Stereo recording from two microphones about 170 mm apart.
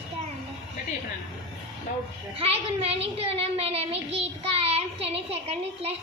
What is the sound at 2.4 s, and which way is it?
A child's voice, 35° right (ahead or behind).